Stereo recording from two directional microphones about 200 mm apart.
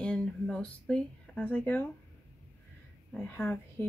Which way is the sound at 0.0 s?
5° left (ahead or behind).